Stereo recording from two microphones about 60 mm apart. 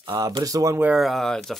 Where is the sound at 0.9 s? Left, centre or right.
Centre.